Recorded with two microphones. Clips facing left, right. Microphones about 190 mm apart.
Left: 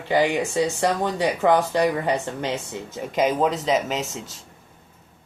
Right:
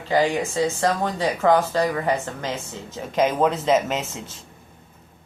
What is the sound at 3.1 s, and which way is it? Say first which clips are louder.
Speech: right 1 dB; 5° left (ahead or behind).